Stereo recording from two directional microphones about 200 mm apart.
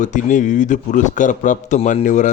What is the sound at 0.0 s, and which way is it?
A man's voice, 40° left (ahead or behind).